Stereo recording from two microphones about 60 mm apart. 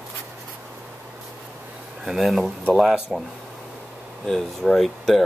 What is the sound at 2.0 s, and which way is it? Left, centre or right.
Speech, centre.